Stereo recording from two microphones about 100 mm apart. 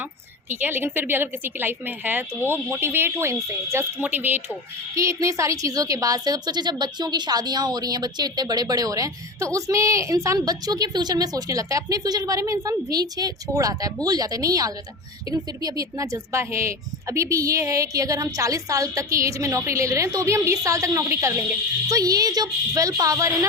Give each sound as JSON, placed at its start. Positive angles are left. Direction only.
{"t": 0.6, "sound": "a woman's voice", "side_deg": -20}
{"t": 4.9, "sound": "a woman's voice", "side_deg": -30}